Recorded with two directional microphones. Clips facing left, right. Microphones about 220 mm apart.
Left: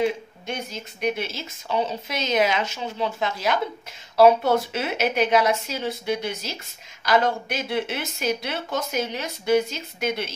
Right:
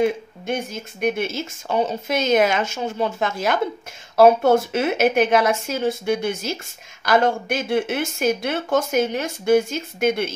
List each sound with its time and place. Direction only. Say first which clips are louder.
0.0 s speech: right 4 dB; 50° right (ahead or behind)